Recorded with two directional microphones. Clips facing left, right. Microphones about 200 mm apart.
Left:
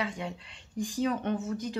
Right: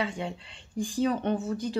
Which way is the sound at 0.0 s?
30° right (ahead or behind).